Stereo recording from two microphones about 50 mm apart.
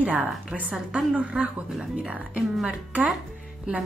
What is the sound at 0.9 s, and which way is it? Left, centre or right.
A woman's voice, right.